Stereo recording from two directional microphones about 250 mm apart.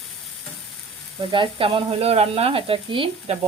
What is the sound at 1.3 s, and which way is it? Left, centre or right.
Speech, right.